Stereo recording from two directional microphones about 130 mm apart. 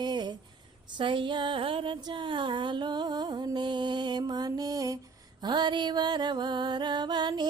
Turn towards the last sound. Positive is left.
turn(degrees=-35)  # may be behind; listen again after turning